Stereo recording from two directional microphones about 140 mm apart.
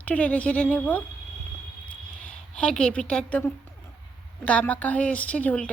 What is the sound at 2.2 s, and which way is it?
A woman's voice, 5° left (ahead or behind).